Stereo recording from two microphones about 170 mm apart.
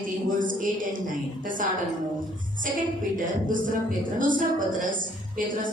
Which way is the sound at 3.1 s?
50° right (ahead or behind).